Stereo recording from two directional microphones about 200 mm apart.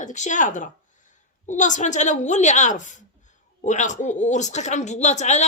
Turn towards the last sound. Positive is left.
turn(degrees=35)  # may be behind; listen again after turning